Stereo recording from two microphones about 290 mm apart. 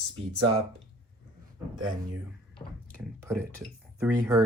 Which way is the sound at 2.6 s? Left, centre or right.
Centre.